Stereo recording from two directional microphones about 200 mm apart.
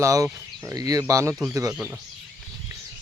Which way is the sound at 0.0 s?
15° right (ahead or behind).